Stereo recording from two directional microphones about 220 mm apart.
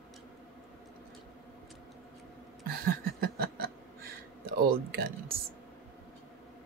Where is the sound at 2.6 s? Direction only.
45° right (ahead or behind).